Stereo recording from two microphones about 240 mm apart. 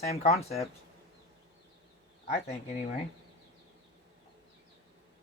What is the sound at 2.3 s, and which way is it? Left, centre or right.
Speech, left.